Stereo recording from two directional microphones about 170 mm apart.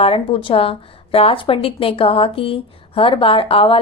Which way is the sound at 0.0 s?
35° left (ahead or behind).